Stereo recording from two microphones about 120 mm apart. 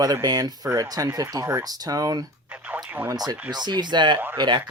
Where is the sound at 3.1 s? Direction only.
35° right (ahead or behind).